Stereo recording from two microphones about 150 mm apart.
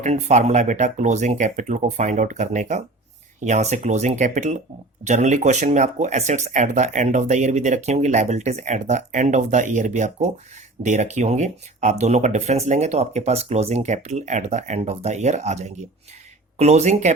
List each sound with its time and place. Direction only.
0.0 s speech: 50° right (ahead or behind)